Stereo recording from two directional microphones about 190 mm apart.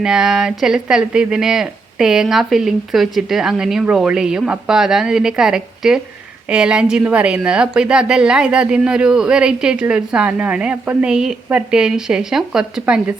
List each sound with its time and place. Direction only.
0.0 s speech: 5° right (ahead or behind)